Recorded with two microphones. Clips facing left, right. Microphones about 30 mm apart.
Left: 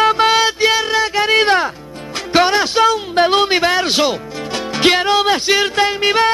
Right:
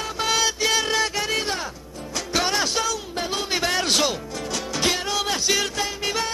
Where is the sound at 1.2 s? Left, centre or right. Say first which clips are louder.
Left 12 dB; left.